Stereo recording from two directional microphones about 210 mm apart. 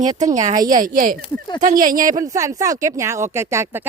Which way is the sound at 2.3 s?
15° right (ahead or behind).